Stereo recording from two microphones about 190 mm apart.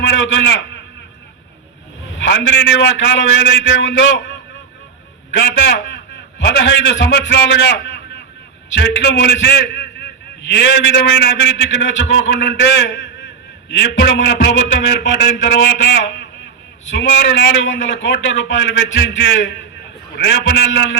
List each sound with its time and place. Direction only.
0.0 s a man's voice: 70° left (ahead or behind)
2.1 s a man's voice: 70° left (ahead or behind)
5.3 s a man's voice: 70° left (ahead or behind)